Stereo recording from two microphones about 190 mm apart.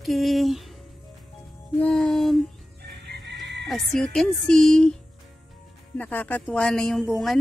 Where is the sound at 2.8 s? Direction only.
65° right (ahead or behind).